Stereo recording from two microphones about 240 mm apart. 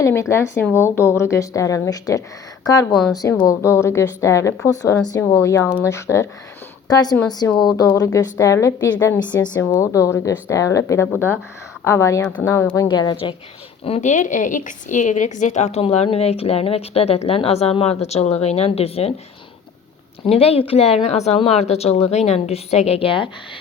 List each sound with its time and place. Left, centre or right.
0.0 s speech: centre
2.9 s a woman's voice: centre
3.2 s a woman's voice: centre
20.2 s a woman's voice: left